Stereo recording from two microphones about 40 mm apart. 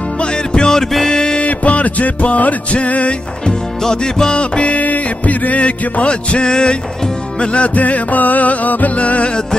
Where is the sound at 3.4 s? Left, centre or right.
Centre.